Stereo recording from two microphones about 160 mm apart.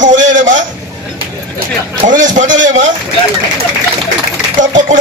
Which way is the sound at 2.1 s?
55° right (ahead or behind).